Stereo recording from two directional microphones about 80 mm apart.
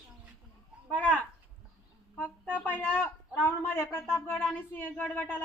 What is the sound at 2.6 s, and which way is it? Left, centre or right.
A woman's voice, left.